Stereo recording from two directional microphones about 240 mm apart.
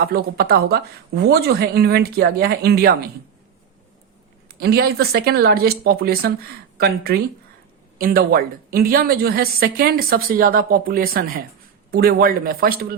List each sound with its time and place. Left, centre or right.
0.0 s a woman's voice: right
4.6 s a woman's voice: right